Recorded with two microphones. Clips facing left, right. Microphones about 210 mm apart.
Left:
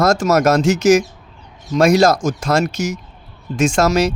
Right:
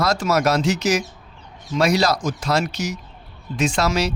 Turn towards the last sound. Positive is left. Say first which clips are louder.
# left 6 dB
turn(degrees=45)  # may be behind; listen again after turning